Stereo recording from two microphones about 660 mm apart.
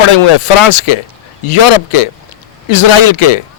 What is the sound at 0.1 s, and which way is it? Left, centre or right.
Speech, left.